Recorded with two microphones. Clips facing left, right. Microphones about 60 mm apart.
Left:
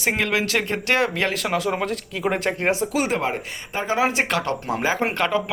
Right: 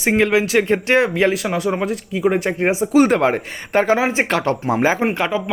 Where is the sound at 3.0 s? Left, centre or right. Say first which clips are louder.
Right 9 dB; right.